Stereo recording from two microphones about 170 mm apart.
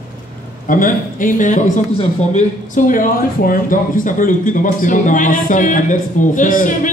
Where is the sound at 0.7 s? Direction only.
50° left (ahead or behind).